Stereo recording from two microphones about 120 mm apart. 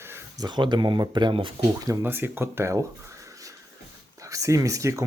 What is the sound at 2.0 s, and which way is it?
Speech, 20° right (ahead or behind).